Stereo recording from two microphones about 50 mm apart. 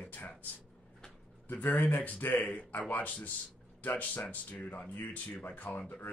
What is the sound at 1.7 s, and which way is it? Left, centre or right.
Speech, left.